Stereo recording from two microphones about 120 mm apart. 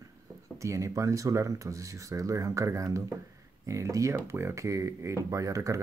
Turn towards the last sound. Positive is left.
turn(degrees=-25)  # may be behind; listen again after turning